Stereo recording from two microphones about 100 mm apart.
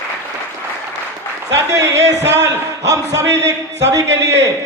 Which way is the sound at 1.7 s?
30° right (ahead or behind).